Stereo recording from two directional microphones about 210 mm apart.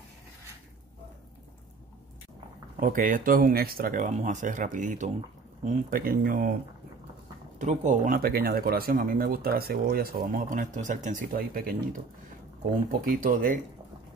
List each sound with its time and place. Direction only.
2.8 s speech: 40° right (ahead or behind)
7.5 s speech: 35° right (ahead or behind)
13.0 s speech: 40° right (ahead or behind)